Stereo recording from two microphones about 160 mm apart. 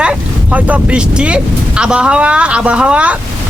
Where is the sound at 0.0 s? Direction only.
10° right (ahead or behind).